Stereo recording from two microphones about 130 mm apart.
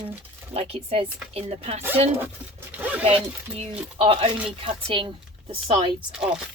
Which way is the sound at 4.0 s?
45° right (ahead or behind).